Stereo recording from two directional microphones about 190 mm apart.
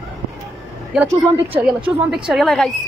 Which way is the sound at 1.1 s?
10° right (ahead or behind).